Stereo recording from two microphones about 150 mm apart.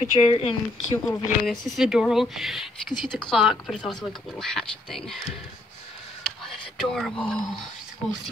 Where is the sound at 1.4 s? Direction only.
Centre (ahead or behind).